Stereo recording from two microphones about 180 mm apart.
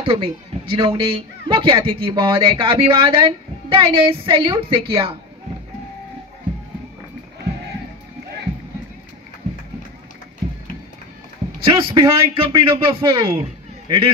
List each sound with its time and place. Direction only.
0.0 s a man's voice: 30° right (ahead or behind)
11.6 s a man's voice: 20° right (ahead or behind)